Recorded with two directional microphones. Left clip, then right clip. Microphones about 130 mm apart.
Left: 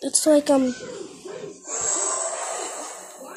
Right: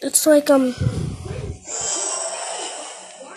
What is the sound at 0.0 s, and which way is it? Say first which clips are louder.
Speech: right 3 dB; 5° right (ahead or behind).